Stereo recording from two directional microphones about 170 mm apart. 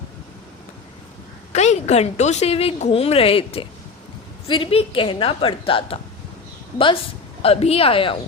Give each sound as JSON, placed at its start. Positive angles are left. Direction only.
{"t": 1.5, "sound": "a woman's voice", "side_deg": 40}
{"t": 7.4, "sound": "a woman's voice", "side_deg": 35}